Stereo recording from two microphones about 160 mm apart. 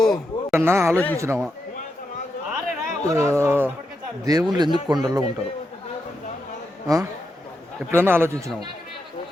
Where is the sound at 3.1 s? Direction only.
20° right (ahead or behind).